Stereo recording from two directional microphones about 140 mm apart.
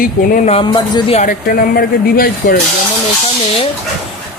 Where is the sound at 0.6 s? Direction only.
35° left (ahead or behind).